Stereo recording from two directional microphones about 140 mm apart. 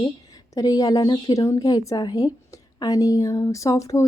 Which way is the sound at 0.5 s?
25° left (ahead or behind).